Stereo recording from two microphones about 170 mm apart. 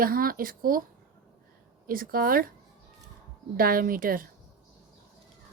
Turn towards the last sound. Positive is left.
turn(degrees=-55)  # may be behind; listen again after turning